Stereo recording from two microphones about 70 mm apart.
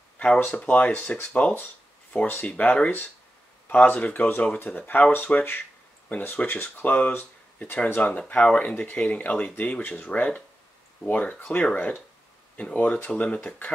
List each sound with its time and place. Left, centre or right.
0.5 s speech: centre